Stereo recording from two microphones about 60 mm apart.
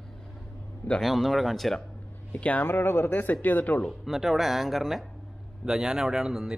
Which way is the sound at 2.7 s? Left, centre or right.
Left.